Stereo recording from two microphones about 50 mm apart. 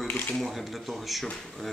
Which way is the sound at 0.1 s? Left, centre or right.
Left.